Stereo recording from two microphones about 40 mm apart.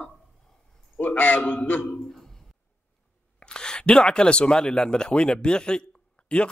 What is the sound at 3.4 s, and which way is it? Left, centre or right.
Speech, left.